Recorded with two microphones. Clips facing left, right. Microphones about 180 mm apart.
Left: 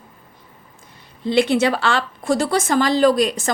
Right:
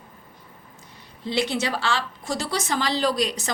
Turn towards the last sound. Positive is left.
turn(degrees=50)  # may be behind; listen again after turning